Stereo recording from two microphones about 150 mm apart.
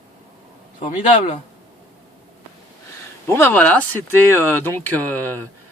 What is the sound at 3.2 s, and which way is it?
Speech, 15° left (ahead or behind).